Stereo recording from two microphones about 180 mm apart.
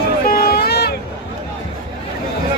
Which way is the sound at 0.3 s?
55° left (ahead or behind).